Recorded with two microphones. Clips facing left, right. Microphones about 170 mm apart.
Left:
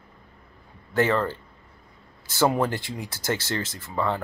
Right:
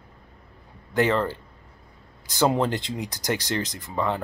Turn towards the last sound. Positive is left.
turn(degrees=-15)  # may be behind; listen again after turning